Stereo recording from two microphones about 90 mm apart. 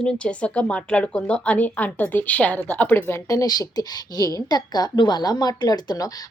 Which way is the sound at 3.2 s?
40° left (ahead or behind).